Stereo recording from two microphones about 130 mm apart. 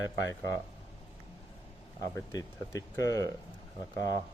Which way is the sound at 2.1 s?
25° left (ahead or behind).